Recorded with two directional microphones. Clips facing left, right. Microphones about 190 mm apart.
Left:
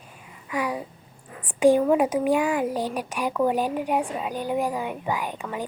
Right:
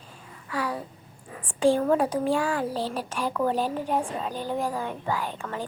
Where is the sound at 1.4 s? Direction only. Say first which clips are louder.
Left 4 dB; 15° left (ahead or behind).